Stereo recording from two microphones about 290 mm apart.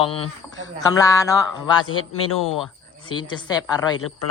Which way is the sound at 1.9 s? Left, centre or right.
Left.